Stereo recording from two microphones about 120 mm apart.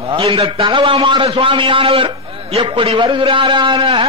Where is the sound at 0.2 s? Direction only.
50° right (ahead or behind).